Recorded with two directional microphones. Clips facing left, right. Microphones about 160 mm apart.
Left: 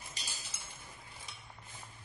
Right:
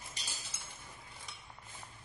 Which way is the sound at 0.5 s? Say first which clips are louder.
Even; centre (ahead or behind).